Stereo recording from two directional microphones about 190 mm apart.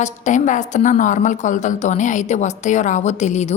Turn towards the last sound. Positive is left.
turn(degrees=40)  # may be behind; listen again after turning